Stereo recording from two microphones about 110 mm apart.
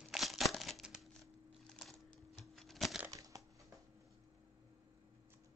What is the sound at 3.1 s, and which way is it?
Crushing, 30° right (ahead or behind).